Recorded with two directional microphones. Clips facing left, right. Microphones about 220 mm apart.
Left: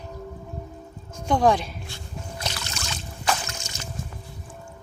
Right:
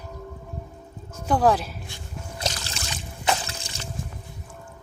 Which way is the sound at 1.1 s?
5° right (ahead or behind).